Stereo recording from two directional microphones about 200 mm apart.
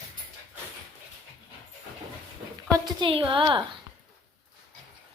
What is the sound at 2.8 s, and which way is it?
Speech, 25° right (ahead or behind).